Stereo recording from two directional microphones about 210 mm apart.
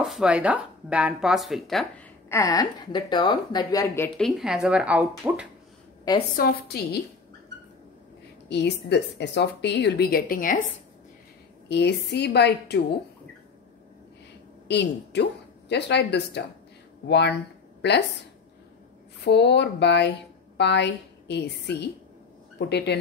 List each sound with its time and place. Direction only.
0.0 s speech: centre (ahead or behind)
2.2 s a woman's voice: 15° left (ahead or behind)
4.4 s speech: centre (ahead or behind)
6.3 s a woman's voice: 45° left (ahead or behind)
8.5 s a woman's voice: 55° left (ahead or behind)
11.7 s a woman's voice: 55° left (ahead or behind)
14.7 s speech: 55° left (ahead or behind)
17.8 s speech: 55° left (ahead or behind)
19.2 s a woman's voice: 55° left (ahead or behind)